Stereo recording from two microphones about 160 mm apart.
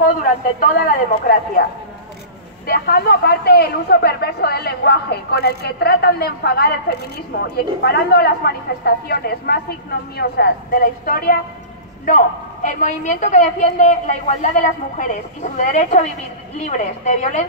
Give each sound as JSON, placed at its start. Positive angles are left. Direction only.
{"t": 0.0, "sound": "speech", "side_deg": 60}
{"t": 2.6, "sound": "speech", "side_deg": 75}
{"t": 12.6, "sound": "a woman's voice", "side_deg": 50}